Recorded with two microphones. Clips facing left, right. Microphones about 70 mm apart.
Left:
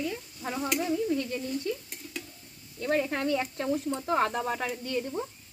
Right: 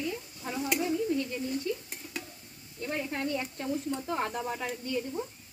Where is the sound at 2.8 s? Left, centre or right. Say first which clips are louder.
Left 5 dB; left.